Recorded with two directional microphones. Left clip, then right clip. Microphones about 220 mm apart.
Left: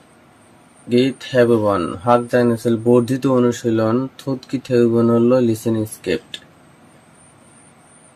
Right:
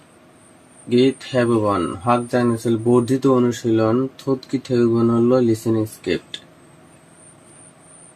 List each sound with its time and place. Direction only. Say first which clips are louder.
0.9 s speech: even; 20° left (ahead or behind)